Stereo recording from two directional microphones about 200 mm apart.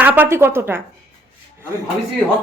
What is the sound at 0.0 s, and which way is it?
Speech, 10° right (ahead or behind).